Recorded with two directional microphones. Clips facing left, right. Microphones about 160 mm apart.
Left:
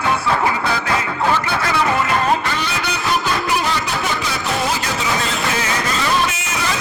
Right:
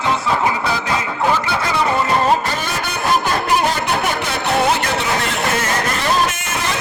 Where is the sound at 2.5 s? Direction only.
45° right (ahead or behind).